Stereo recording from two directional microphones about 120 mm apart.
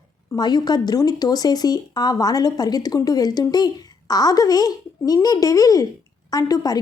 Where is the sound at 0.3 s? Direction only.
35° left (ahead or behind).